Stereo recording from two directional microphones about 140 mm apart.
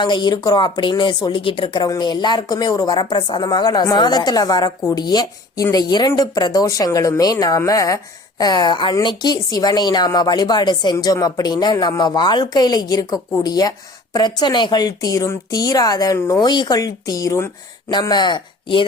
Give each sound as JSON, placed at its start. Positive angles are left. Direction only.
{"t": 0.0, "sound": "a woman's voice", "side_deg": 35}
{"t": 17.9, "sound": "speech", "side_deg": 30}